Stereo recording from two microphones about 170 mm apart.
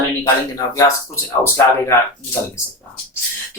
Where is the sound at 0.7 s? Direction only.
15° left (ahead or behind).